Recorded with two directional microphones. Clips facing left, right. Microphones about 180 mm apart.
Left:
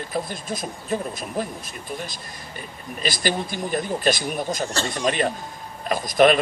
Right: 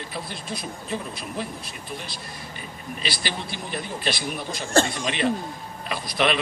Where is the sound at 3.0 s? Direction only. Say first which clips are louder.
Left 7 dB; 45° left (ahead or behind).